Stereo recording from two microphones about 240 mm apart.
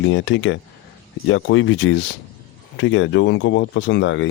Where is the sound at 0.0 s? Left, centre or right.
Left.